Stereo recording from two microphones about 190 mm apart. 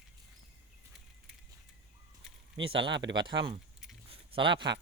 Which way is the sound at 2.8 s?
70° right (ahead or behind).